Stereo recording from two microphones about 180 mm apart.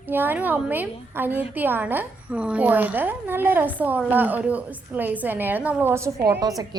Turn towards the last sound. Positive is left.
turn(degrees=-20)  # may be behind; listen again after turning